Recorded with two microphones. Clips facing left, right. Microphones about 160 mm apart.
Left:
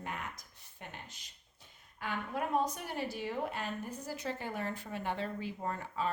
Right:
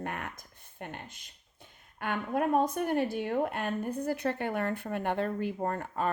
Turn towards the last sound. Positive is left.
turn(degrees=-55)  # may be behind; listen again after turning